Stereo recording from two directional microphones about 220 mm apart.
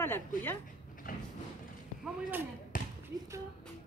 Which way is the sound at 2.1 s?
10° right (ahead or behind).